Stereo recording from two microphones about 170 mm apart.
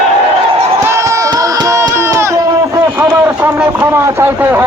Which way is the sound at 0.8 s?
15° right (ahead or behind).